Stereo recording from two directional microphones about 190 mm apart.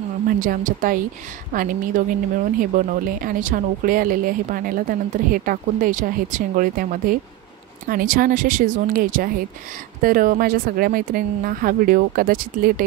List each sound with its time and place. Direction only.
0.4 s speech: 45° right (ahead or behind)